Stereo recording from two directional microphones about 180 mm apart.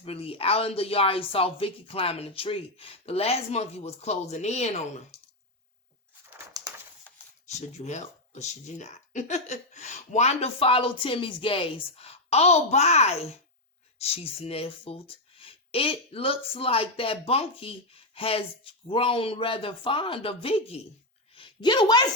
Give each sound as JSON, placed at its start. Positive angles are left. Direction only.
{"t": 0.0, "sound": "speech", "side_deg": 30}
{"t": 7.4, "sound": "speech", "side_deg": 40}
{"t": 21.3, "sound": "a sound", "side_deg": 25}